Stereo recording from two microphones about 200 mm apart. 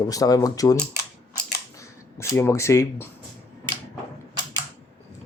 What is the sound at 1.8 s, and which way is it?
Speech, 15° left (ahead or behind).